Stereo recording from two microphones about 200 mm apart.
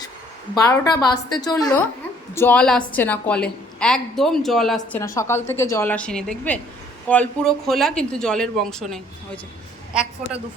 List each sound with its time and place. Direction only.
0.5 s a woman's voice: 20° left (ahead or behind); by 4.9 s centre (ahead or behind)
4.9 s a woman's voice: 15° left (ahead or behind); by 10.4 s 5° right (ahead or behind)